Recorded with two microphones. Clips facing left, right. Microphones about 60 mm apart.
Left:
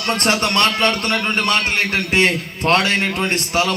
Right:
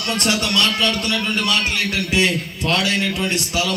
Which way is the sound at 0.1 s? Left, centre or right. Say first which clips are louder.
Left 3 dB; left.